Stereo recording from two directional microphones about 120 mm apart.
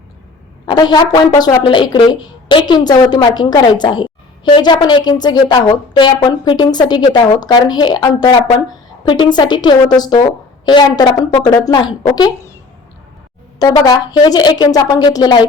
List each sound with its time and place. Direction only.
0.6 s a woman's voice: 35° left (ahead or behind)
1.3 s speech: 25° left (ahead or behind)
1.6 s a woman's voice: 40° left (ahead or behind)
13.6 s a woman's voice: 30° left (ahead or behind)